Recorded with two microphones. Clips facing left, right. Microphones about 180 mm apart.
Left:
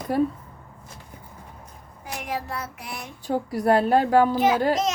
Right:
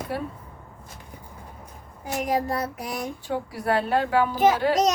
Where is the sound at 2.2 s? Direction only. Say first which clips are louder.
Right 6 dB; 40° right (ahead or behind).